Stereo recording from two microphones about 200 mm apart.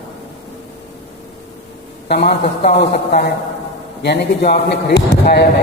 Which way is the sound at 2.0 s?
55° left (ahead or behind).